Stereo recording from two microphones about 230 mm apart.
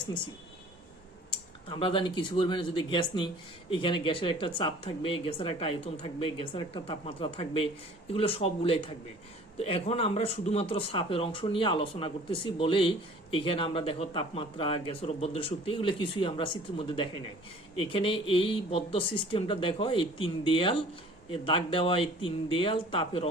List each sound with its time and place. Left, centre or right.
1.7 s speech: left